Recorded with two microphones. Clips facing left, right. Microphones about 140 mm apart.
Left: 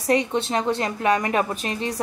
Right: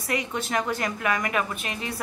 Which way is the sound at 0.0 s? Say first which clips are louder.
Left 8 dB; 35° left (ahead or behind).